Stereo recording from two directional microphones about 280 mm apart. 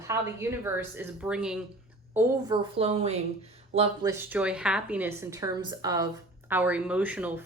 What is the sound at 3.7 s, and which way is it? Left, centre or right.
A woman's voice, centre.